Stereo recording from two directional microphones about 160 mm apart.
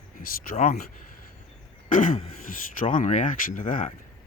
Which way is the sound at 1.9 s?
55° left (ahead or behind).